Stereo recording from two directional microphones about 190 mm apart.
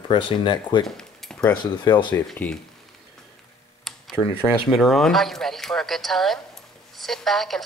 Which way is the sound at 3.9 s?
Centre (ahead or behind).